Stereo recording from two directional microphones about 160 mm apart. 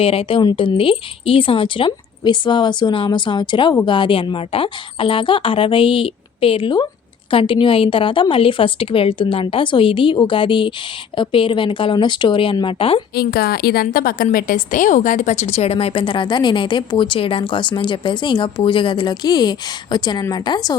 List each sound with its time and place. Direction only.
0.0 s a woman's voice: 35° left (ahead or behind)
13.1 s a woman's voice: 75° left (ahead or behind); by 20.7 s 25° left (ahead or behind)